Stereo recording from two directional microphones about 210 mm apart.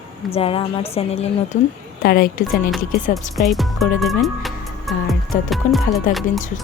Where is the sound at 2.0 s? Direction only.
45° left (ahead or behind).